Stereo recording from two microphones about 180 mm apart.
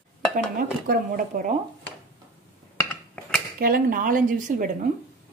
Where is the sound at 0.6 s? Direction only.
50° right (ahead or behind).